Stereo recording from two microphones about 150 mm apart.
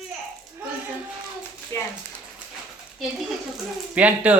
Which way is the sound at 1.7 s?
20° left (ahead or behind).